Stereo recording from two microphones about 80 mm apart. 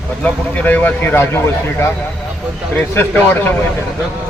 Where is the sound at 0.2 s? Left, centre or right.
Left.